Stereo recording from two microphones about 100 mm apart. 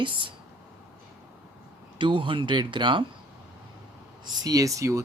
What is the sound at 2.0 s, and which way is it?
Speech, 55° right (ahead or behind).